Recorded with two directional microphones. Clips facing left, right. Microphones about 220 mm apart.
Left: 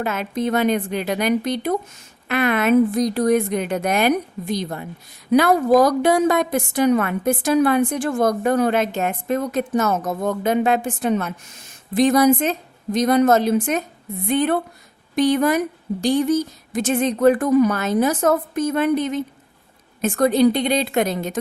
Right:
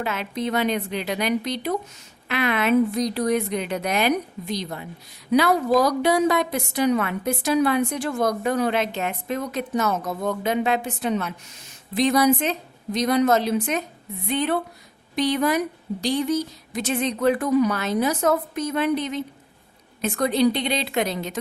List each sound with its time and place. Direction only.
0.0 s a woman's voice: 45° left (ahead or behind)